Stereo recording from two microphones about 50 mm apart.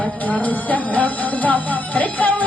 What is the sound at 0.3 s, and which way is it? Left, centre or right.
Music, left.